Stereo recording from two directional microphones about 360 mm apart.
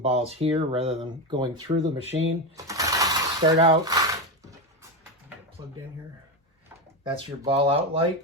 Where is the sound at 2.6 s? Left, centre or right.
Centre.